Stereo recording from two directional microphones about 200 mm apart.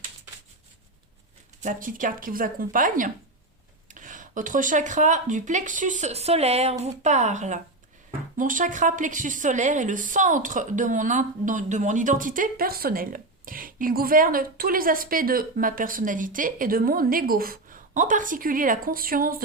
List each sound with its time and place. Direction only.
1.6 s a woman's voice: 45° right (ahead or behind)